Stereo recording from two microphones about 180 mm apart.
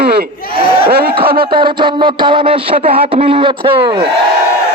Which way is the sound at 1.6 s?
30° right (ahead or behind).